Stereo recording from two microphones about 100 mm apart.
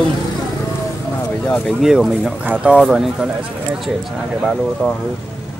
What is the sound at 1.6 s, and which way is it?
Speech, 5° right (ahead or behind).